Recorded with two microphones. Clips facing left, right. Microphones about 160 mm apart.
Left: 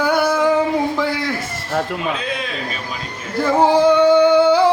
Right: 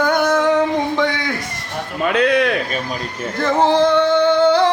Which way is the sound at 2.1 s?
70° right (ahead or behind).